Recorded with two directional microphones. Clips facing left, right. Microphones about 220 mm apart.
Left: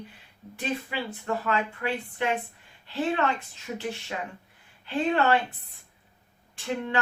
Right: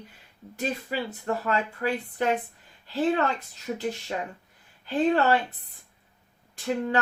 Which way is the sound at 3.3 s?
35° right (ahead or behind).